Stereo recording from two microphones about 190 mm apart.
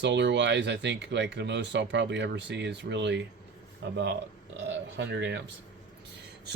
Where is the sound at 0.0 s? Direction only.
65° right (ahead or behind).